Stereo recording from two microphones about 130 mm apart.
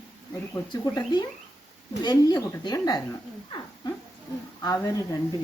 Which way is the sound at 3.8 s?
35° left (ahead or behind).